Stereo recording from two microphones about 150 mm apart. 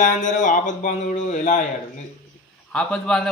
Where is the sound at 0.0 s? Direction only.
55° left (ahead or behind).